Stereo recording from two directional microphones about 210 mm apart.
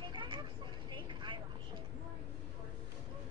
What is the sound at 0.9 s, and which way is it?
Vehicle, 25° right (ahead or behind).